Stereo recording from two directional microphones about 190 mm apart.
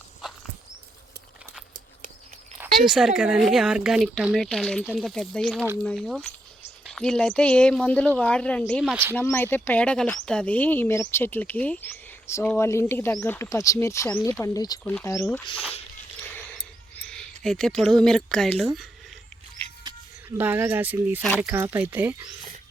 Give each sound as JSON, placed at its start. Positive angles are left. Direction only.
{"t": 2.6, "sound": "a sound", "side_deg": -5}
{"t": 3.2, "sound": "speech", "side_deg": -5}
{"t": 8.9, "sound": "speech", "side_deg": -10}
{"t": 9.1, "sound": "speech", "side_deg": 10}
{"t": 17.1, "sound": "speech", "side_deg": 0}
{"t": 20.4, "sound": "speech", "side_deg": -10}